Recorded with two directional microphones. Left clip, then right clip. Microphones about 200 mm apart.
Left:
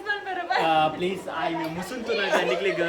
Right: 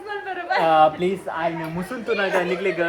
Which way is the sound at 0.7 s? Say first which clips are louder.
Right 9 dB; 35° right (ahead or behind).